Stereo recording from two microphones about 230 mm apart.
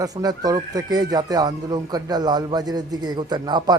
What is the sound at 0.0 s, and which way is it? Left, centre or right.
A man's voice, centre.